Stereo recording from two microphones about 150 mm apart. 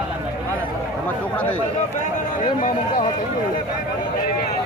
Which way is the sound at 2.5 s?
60° left (ahead or behind).